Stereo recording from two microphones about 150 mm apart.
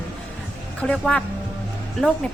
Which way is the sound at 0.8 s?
5° left (ahead or behind).